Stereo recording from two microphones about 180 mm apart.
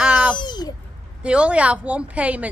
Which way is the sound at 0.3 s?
25° left (ahead or behind).